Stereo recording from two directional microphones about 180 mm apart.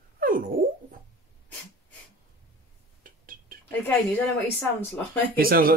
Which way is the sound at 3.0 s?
50° right (ahead or behind).